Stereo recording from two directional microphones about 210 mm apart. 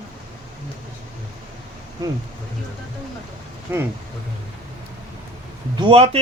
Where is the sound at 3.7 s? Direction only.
10° right (ahead or behind).